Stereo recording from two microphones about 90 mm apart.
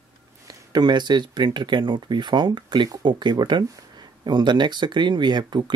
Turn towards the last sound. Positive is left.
turn(degrees=-60)  # may be behind; listen again after turning